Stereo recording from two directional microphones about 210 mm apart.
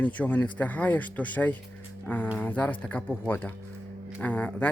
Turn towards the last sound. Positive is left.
turn(degrees=5)  # may be behind; listen again after turning